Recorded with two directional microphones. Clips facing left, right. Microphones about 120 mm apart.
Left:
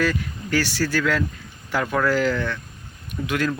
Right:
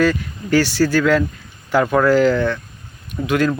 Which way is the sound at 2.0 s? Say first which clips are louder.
Right 7 dB; 25° right (ahead or behind).